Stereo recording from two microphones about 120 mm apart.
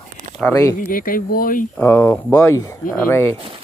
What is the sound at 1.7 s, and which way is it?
Speech, 15° left (ahead or behind).